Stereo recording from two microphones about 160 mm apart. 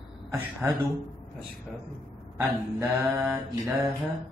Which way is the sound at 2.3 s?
15° right (ahead or behind).